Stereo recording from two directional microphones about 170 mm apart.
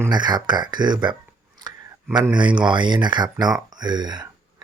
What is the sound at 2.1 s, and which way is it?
Speech, 25° right (ahead or behind).